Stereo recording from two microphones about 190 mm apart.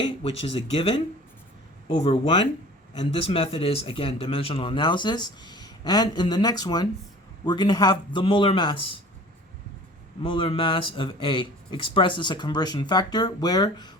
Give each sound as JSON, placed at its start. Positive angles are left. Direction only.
{"t": 0.0, "sound": "speech", "side_deg": 30}
{"t": 2.0, "sound": "speech", "side_deg": 25}
{"t": 10.2, "sound": "speech", "side_deg": 25}